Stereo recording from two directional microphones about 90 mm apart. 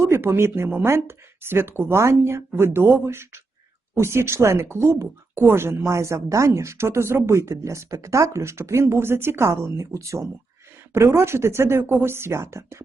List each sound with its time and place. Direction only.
0.0 s speech: 30° right (ahead or behind)